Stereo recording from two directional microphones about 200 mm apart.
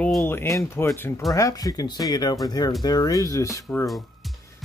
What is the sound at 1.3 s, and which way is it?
Speech, 15° left (ahead or behind).